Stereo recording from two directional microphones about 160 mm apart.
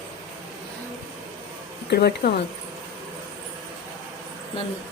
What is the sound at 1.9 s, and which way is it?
Speech, 85° left.